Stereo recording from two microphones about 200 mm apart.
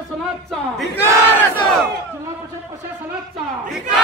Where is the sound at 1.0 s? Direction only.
10° left (ahead or behind).